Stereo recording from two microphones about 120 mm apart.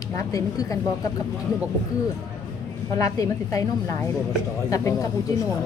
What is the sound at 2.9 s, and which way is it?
A woman's voice, 30° left (ahead or behind).